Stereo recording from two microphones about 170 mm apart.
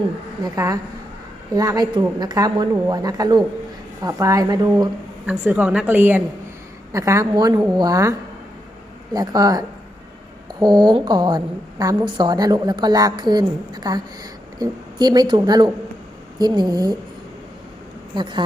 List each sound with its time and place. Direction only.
0.4 s a woman's voice: 20° right (ahead or behind)
5.2 s a woman's voice: 10° right (ahead or behind)
9.1 s a woman's voice: 25° right (ahead or behind)
18.1 s a woman's voice: 25° right (ahead or behind)